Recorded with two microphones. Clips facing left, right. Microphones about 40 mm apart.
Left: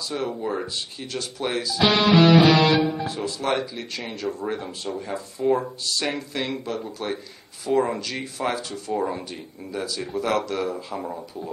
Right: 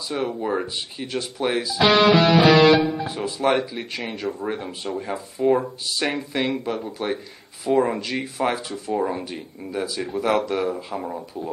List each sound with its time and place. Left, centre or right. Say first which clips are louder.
0.4 s speech: right 3 dB; centre
2.5 s speech: right 4 dB; right